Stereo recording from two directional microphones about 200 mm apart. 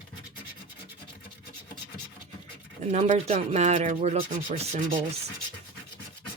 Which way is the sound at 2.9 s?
35° right (ahead or behind).